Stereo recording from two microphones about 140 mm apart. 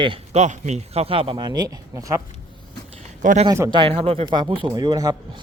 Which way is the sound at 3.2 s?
65° right (ahead or behind).